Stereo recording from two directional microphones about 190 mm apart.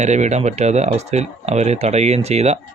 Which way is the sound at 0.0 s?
40° right (ahead or behind).